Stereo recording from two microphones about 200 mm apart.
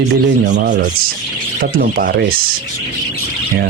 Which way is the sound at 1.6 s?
45° right (ahead or behind).